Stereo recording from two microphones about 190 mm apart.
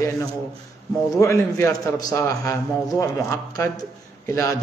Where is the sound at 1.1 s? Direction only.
15° left (ahead or behind).